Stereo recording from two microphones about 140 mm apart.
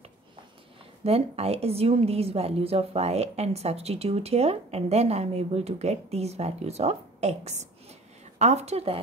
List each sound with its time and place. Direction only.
1.0 s a woman's voice: 45° right (ahead or behind)